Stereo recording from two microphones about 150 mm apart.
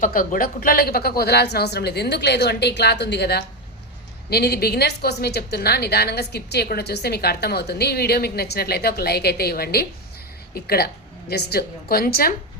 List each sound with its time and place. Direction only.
0.0 s a woman's voice: 65° left (ahead or behind); by 12.3 s 85° left